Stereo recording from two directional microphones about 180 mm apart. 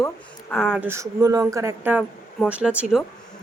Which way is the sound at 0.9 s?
20° right (ahead or behind).